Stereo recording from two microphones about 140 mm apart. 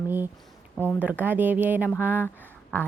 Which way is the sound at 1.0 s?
10° right (ahead or behind).